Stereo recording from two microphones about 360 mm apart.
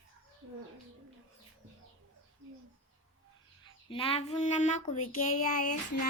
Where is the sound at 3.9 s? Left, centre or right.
Centre.